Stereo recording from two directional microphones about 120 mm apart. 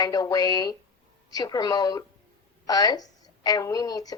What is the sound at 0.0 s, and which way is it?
A woman's voice, 30° left (ahead or behind).